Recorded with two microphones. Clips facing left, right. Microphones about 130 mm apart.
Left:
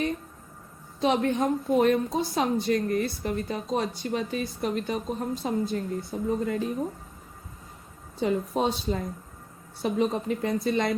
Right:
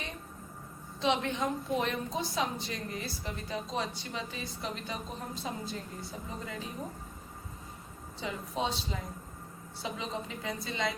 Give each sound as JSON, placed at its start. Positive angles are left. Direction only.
{"t": 1.0, "sound": "a woman's voice", "side_deg": 50}
{"t": 8.2, "sound": "a woman's voice", "side_deg": 50}